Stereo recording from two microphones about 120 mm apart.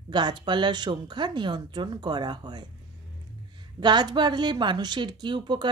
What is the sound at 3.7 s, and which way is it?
Speech, 40° right (ahead or behind).